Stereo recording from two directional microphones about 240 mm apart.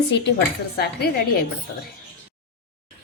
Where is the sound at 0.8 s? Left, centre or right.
Left.